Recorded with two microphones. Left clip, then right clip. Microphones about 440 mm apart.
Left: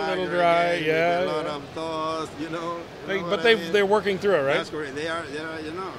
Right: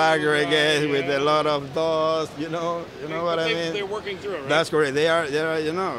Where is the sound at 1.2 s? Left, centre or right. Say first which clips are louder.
Right 6 dB; right.